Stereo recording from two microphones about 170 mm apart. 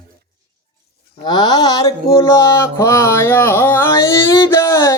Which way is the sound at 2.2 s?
15° left (ahead or behind).